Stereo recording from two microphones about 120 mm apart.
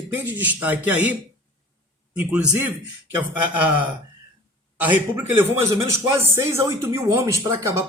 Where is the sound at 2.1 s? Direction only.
10° right (ahead or behind).